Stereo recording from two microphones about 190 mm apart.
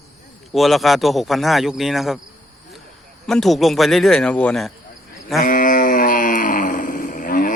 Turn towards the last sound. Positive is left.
turn(degrees=45)  # may be behind; listen again after turning